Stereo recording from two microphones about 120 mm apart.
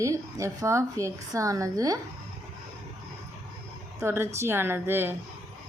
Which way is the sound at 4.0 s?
20° right (ahead or behind).